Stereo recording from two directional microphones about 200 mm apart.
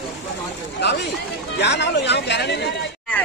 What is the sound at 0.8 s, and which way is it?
Speech, 60° left (ahead or behind).